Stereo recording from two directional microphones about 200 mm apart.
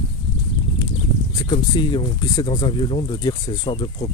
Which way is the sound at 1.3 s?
20° left (ahead or behind).